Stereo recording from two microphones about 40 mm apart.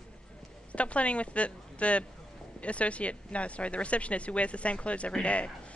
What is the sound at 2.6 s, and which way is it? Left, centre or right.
Speech, left.